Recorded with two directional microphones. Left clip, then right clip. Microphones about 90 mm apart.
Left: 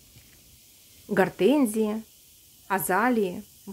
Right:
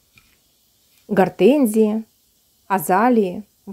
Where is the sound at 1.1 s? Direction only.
45° right (ahead or behind).